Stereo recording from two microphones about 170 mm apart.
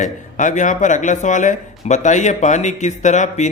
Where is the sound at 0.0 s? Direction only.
45° left (ahead or behind).